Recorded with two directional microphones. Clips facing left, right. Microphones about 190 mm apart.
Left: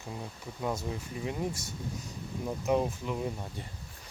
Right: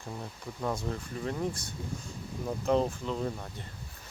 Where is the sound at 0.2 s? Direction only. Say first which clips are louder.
Even; 5° left (ahead or behind).